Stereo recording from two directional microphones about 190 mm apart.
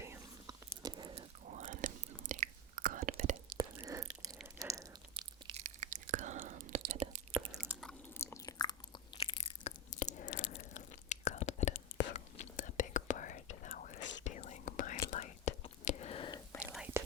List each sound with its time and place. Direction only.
0.0 s whispering: 15° right (ahead or behind)
1.5 s chewing: 40° right (ahead or behind)
3.6 s a sound: 15° right (ahead or behind)
5.1 s chewing: 25° right (ahead or behind)
5.6 s chewing: 40° right (ahead or behind)
7.7 s chewing: 5° right (ahead or behind)
8.2 s chewing: 15° left (ahead or behind)
9.2 s crunch: 35° left (ahead or behind)
10.2 s biting: 65° left (ahead or behind)
10.6 s biting: 40° left (ahead or behind)
12.1 s whispering: 40° left (ahead or behind); by 16.6 s 25° left (ahead or behind)
16.7 s whispering: 10° right (ahead or behind)